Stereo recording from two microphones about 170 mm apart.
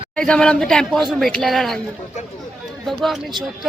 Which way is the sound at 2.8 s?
Centre (ahead or behind).